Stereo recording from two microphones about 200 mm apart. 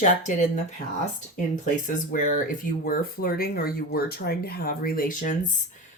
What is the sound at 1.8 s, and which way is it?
Speech, 40° left (ahead or behind).